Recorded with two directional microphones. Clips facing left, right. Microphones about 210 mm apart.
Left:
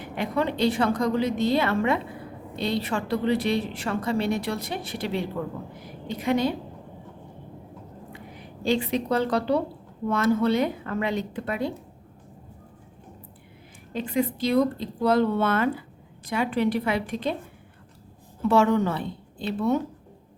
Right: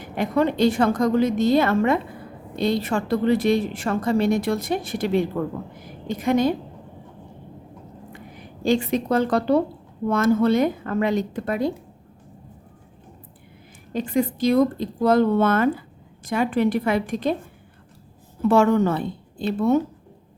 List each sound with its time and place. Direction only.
0.0 s a woman's voice: 45° right (ahead or behind)
8.6 s a woman's voice: 45° right (ahead or behind)
13.9 s a woman's voice: 45° right (ahead or behind)
18.4 s a woman's voice: 50° right (ahead or behind)